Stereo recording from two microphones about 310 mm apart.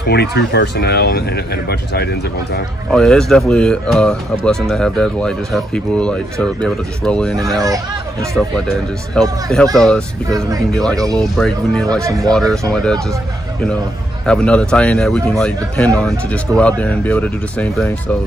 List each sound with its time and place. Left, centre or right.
0.0 s speech: left
2.9 s speech: centre
7.6 s speech: centre
8.6 s speech: centre
12.0 s speech: centre
12.3 s speech: centre
14.2 s speech: centre